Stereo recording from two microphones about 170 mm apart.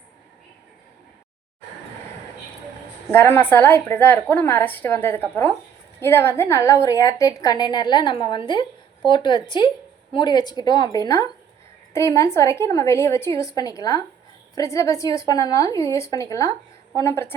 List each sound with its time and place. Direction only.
3.1 s a woman's voice: 10° left (ahead or behind)